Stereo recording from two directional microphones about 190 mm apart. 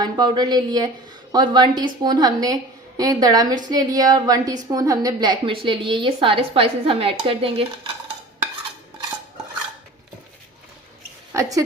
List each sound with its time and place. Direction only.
0.0 s a woman's voice: 20° right (ahead or behind)
11.3 s a woman's voice: 15° right (ahead or behind)